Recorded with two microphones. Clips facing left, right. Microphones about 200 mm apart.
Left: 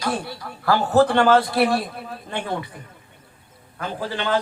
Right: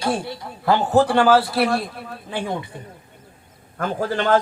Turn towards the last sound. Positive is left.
turn(degrees=-45)  # may be behind; listen again after turning